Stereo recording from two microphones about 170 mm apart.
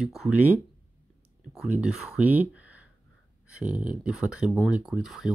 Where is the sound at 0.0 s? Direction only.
5° right (ahead or behind).